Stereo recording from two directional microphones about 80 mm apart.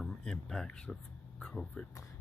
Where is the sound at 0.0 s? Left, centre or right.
Centre.